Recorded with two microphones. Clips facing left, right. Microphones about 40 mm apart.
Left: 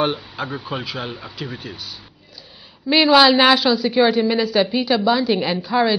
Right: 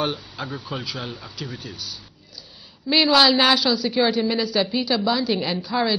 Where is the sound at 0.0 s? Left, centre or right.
Centre.